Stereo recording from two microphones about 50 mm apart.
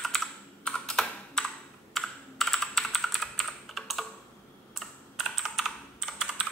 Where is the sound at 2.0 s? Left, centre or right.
Centre.